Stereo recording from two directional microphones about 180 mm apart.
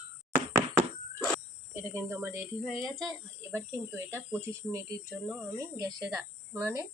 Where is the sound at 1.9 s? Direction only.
15° right (ahead or behind).